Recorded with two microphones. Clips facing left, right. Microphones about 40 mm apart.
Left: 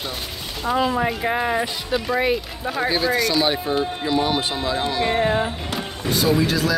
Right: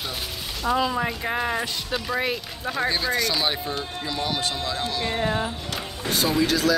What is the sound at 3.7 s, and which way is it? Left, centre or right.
Speech, left.